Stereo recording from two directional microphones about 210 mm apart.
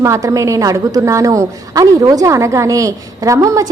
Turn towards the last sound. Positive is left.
turn(degrees=-15)  # may be behind; listen again after turning